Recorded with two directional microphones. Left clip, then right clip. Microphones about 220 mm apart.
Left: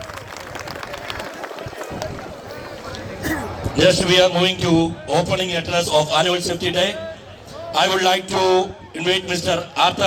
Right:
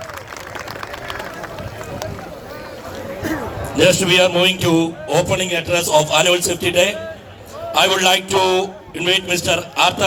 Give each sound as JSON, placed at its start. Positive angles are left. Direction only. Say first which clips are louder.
{"t": 3.8, "sound": "a man's voice", "louder": "right 1 dB", "side_deg": -20}